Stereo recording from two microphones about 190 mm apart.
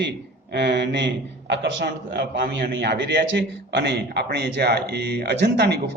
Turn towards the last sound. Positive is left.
turn(degrees=-60)  # may be behind; listen again after turning